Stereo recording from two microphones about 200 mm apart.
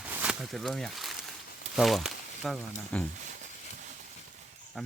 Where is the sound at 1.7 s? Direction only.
Centre (ahead or behind).